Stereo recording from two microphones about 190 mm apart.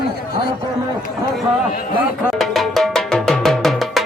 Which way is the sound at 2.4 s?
Centre (ahead or behind).